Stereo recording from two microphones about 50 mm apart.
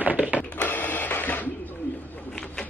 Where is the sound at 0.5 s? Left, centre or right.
Left.